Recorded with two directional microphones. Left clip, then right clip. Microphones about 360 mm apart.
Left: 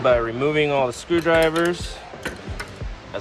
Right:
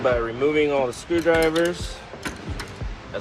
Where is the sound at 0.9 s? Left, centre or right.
Left.